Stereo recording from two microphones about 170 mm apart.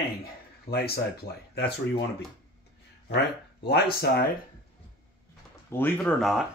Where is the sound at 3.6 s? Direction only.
70° left (ahead or behind).